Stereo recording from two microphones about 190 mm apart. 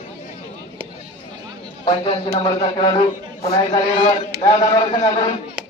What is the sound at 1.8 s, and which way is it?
A man's voice, 30° left (ahead or behind).